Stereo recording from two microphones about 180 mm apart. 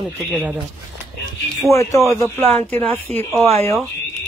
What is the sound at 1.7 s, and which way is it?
Speech, 15° left (ahead or behind).